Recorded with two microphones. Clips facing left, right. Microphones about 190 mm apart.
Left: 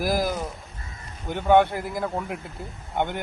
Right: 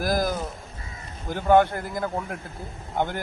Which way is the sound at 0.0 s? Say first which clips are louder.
Even; centre (ahead or behind).